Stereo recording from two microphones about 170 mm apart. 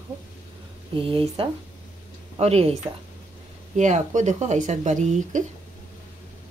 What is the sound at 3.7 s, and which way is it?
Speech, 45° right (ahead or behind).